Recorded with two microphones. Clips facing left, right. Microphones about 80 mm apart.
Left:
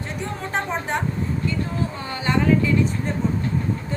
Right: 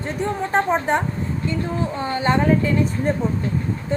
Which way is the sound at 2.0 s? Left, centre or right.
Right.